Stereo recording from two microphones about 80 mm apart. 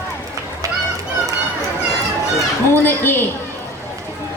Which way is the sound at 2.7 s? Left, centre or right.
Left.